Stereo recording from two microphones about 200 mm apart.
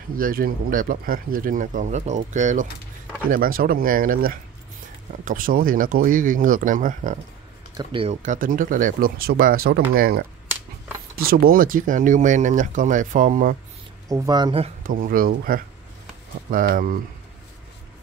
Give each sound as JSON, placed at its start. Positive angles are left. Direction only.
{"t": 0.1, "sound": "speech", "side_deg": -45}
{"t": 7.7, "sound": "speech", "side_deg": -25}
{"t": 14.0, "sound": "speech", "side_deg": -15}
{"t": 14.8, "sound": "speech", "side_deg": -45}